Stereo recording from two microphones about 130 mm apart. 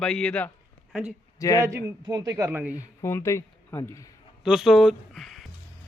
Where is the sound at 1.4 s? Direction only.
25° left (ahead or behind).